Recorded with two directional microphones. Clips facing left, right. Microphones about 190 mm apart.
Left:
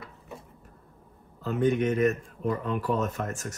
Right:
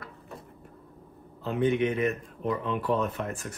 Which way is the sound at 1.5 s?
45° left (ahead or behind).